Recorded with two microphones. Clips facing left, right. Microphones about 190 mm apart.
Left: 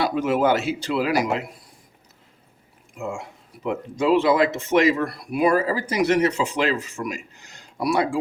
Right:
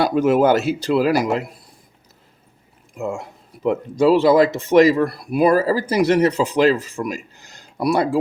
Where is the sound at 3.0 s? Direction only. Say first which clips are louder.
Right 4 dB; 40° right (ahead or behind).